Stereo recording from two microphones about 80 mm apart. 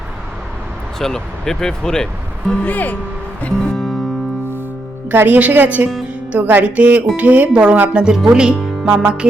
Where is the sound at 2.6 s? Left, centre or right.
Left.